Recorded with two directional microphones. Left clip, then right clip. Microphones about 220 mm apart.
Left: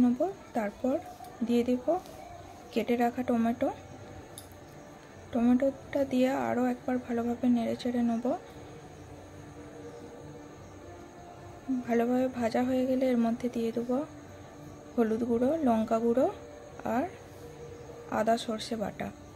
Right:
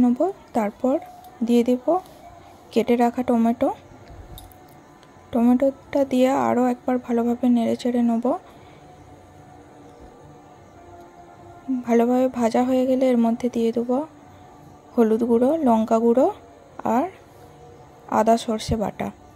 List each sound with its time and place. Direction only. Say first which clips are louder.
0.0 s a woman's voice: right 7 dB; 30° right (ahead or behind)
5.3 s speech: right 8 dB; 25° right (ahead or behind)
11.9 s speech: right 9 dB; 30° right (ahead or behind)
18.1 s speech: right 10 dB; 30° right (ahead or behind)